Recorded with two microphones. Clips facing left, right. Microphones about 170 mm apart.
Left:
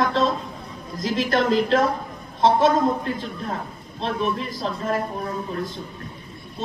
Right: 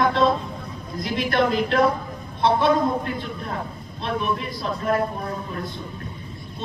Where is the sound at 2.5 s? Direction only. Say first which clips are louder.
Left 1 dB; 40° left (ahead or behind).